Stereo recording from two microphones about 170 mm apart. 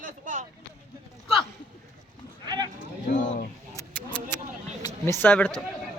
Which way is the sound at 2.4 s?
25° right (ahead or behind).